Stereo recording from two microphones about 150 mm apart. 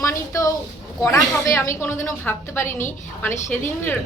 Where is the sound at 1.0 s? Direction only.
20° left (ahead or behind).